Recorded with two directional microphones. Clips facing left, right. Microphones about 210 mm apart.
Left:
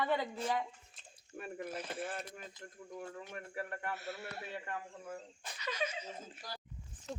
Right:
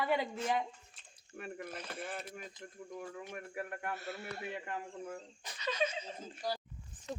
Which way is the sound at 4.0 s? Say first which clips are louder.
Right 1 dB; 5° left (ahead or behind).